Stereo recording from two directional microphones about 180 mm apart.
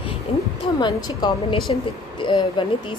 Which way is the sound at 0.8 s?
25° left (ahead or behind).